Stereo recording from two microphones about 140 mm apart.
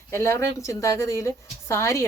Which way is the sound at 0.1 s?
20° left (ahead or behind).